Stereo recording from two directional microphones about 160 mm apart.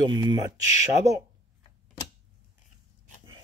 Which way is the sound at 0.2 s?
25° right (ahead or behind).